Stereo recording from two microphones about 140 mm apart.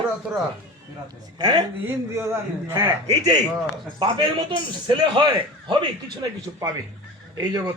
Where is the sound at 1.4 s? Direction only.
30° right (ahead or behind).